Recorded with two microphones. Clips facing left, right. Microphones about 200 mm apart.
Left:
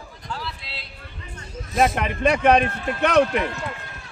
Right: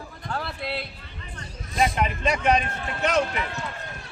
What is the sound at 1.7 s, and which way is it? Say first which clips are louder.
Speech: left 3 dB; 55° left (ahead or behind).